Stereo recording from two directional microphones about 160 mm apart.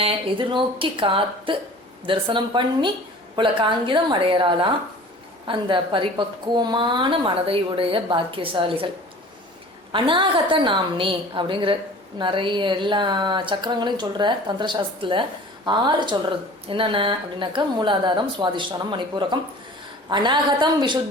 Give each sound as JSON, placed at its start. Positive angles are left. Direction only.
{"t": 0.0, "sound": "a woman's voice", "side_deg": -35}
{"t": 9.9, "sound": "a woman's voice", "side_deg": -30}